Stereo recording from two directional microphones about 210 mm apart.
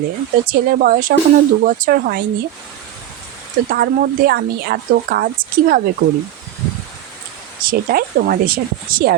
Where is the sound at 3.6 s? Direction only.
45° right (ahead or behind).